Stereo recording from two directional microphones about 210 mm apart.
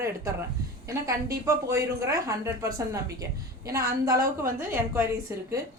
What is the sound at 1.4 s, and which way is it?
A woman's voice, 15° right (ahead or behind).